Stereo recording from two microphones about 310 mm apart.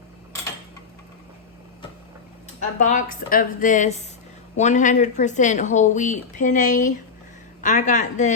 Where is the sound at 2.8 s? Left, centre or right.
Left.